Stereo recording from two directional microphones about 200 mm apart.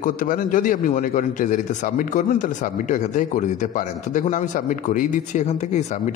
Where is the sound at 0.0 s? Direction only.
40° left (ahead or behind).